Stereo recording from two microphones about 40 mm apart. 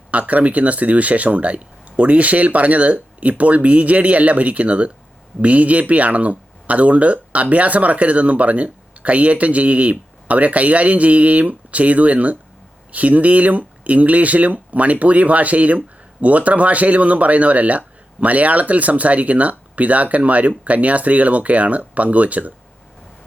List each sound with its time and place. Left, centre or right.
0.1 s speech: right